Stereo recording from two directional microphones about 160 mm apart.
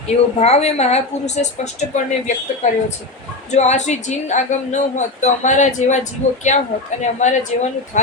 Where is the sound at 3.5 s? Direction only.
45° left (ahead or behind).